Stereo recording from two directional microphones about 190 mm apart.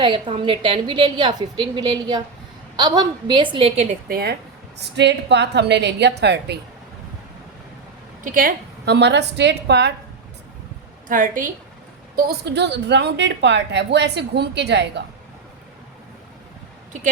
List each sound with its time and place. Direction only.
0.0 s a woman's voice: 25° right (ahead or behind)
4.8 s a woman's voice: 65° right (ahead or behind)
8.2 s a woman's voice: 45° right (ahead or behind); by 9.9 s 65° right (ahead or behind)
11.1 s a woman's voice: 45° right (ahead or behind)
12.1 s a woman's voice: 60° right (ahead or behind)